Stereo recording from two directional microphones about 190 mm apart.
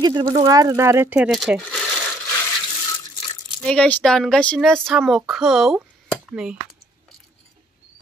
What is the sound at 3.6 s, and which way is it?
Speech, 5° left (ahead or behind).